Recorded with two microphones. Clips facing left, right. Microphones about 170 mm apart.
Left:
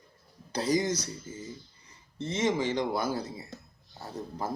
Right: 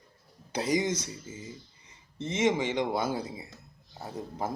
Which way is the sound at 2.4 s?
20° right (ahead or behind).